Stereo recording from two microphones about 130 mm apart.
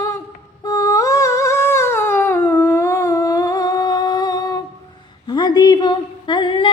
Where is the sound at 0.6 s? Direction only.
25° left (ahead or behind).